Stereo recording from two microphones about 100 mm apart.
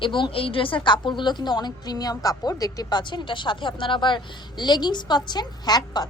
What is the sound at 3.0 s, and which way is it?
A woman's voice, 50° left (ahead or behind).